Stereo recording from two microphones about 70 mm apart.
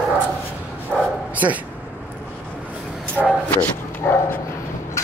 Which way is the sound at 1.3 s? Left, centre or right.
Right.